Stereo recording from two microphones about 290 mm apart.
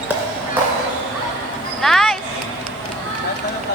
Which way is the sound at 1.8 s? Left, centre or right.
Centre.